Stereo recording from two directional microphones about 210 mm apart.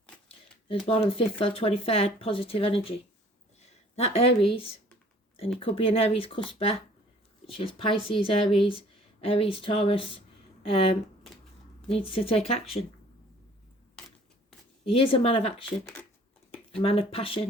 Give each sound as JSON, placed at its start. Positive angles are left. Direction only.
{"t": 0.9, "sound": "speech", "side_deg": 25}
{"t": 14.8, "sound": "speech", "side_deg": 25}
{"t": 15.8, "sound": "speech", "side_deg": 5}
{"t": 16.8, "sound": "speech", "side_deg": 25}